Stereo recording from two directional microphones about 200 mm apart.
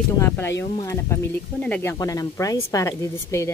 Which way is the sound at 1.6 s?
10° left (ahead or behind).